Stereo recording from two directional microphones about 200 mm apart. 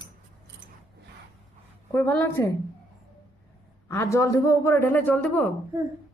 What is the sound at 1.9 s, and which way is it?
Speech, 10° left (ahead or behind).